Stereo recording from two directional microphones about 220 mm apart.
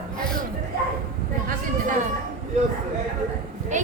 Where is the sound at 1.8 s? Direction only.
35° right (ahead or behind).